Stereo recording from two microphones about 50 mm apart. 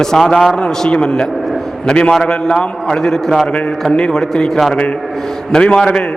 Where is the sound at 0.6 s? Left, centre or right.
Centre.